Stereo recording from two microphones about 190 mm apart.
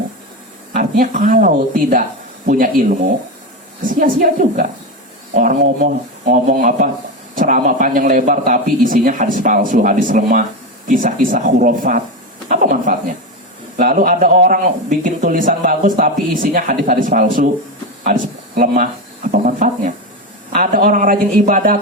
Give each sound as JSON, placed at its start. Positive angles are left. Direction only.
{"t": 0.8, "sound": "a man's voice", "side_deg": -40}
{"t": 12.5, "sound": "a sound", "side_deg": -45}
{"t": 13.7, "sound": "a man's voice", "side_deg": -45}